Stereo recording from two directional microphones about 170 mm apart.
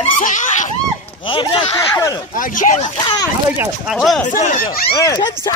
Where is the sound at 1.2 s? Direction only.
30° left (ahead or behind).